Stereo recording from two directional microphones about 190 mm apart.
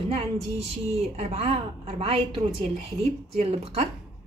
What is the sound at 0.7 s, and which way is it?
Speech, 35° right (ahead or behind).